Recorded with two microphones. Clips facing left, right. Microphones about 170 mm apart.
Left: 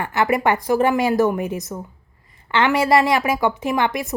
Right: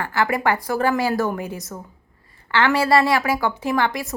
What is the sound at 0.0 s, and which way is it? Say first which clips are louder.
A woman's voice: left 2 dB; 20° left (ahead or behind).